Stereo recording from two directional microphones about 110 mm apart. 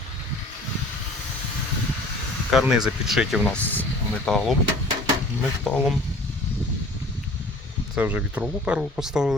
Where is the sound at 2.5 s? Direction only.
5° right (ahead or behind).